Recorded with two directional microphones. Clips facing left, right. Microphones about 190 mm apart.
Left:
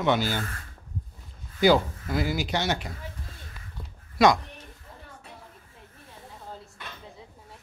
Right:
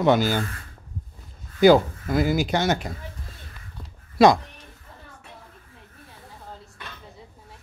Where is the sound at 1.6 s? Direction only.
50° right (ahead or behind).